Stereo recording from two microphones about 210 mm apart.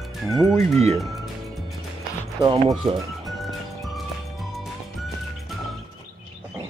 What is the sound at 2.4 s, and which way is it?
Speech, 20° right (ahead or behind).